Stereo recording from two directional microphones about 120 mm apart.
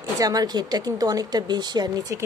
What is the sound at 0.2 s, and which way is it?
Speech, 35° right (ahead or behind).